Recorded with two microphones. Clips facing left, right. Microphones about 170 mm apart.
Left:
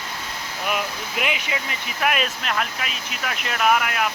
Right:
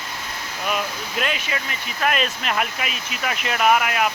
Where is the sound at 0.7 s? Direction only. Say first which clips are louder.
Right 1 dB; 10° left (ahead or behind).